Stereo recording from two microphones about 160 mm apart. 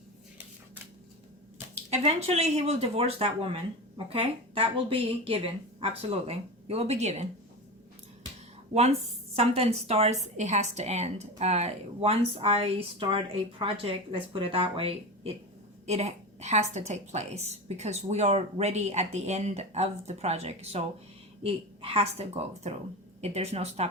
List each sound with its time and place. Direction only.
1.9 s a woman's voice: 40° right (ahead or behind)
8.7 s a woman's voice: 40° right (ahead or behind)